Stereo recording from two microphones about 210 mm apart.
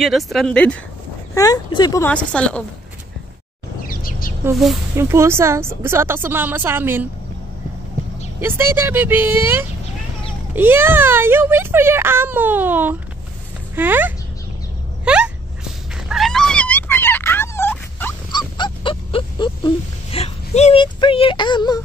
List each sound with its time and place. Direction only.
0.0 s speech: centre (ahead or behind)
1.3 s speech: 15° left (ahead or behind)
3.8 s bird: 45° left (ahead or behind)
4.9 s a child's voice: 15° right (ahead or behind)
8.4 s a child's voice: 10° right (ahead or behind)
15.0 s a sound: 5° right (ahead or behind)
18.6 s a sound: 20° left (ahead or behind)